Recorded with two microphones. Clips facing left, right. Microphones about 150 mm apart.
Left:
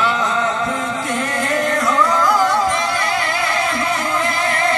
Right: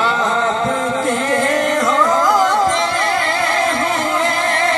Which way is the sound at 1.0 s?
45° right (ahead or behind).